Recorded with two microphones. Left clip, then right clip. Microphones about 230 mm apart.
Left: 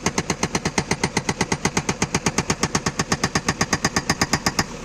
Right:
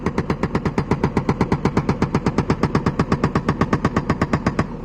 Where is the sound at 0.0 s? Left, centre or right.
Centre.